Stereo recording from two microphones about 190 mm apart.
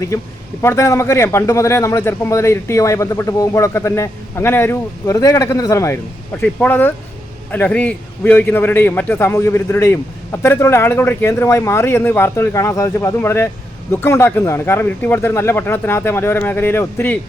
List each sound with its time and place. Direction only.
0.1 s a man's voice: 15° left (ahead or behind)